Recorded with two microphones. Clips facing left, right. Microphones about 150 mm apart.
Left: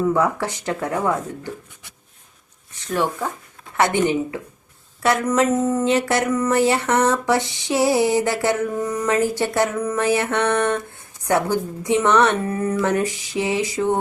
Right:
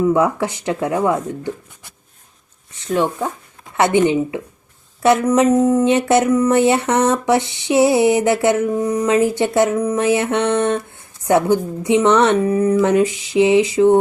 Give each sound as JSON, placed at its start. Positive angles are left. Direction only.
{"t": 0.1, "sound": "speech", "side_deg": -20}
{"t": 2.9, "sound": "speech", "side_deg": -20}
{"t": 12.8, "sound": "a sound", "side_deg": -20}